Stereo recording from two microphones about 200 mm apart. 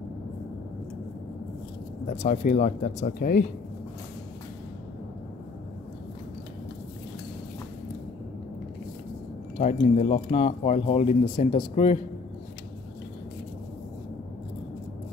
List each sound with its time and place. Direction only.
2.0 s speech: 40° left (ahead or behind)
9.6 s speech: 35° left (ahead or behind)